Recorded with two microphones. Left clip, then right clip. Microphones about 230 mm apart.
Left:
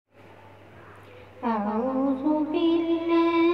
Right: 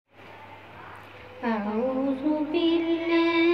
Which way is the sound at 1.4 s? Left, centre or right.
Left.